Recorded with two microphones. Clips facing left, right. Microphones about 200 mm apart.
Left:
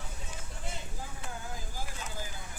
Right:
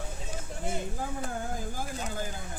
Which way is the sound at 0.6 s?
50° right (ahead or behind).